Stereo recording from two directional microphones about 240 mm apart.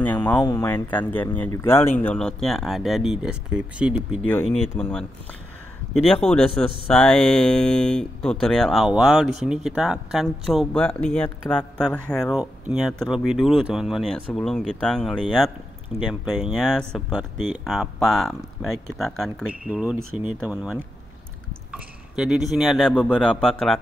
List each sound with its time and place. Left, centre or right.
0.0 s speech: centre
4.3 s speech: centre
6.2 s speech: centre
21.7 s a sound: centre
22.5 s speech: centre